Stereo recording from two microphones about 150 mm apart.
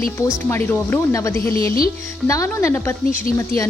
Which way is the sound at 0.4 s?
15° left (ahead or behind).